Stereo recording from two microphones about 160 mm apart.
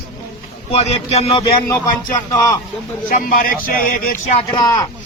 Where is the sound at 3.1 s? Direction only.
60° left (ahead or behind).